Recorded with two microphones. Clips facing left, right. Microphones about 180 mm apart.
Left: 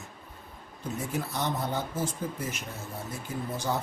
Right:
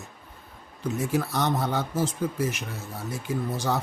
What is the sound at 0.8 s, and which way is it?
A man's voice, 75° right (ahead or behind).